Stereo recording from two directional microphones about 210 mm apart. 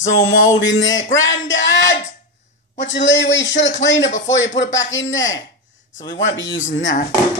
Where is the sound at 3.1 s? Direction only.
60° left (ahead or behind).